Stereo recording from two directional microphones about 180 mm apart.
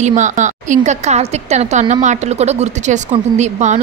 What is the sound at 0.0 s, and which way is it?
A woman's voice, 40° right (ahead or behind).